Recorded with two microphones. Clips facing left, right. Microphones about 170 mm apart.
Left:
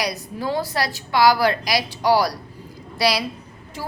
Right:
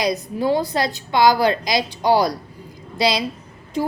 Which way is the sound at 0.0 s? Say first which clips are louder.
Right 5 dB; 20° right (ahead or behind).